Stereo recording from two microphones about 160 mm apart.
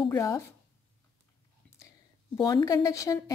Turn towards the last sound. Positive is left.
turn(degrees=20)  # may be behind; listen again after turning